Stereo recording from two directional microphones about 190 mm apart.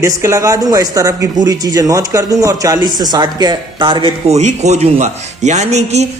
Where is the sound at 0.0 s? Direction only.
15° right (ahead or behind).